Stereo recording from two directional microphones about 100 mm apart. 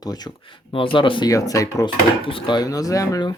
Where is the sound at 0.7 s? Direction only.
60° left (ahead or behind).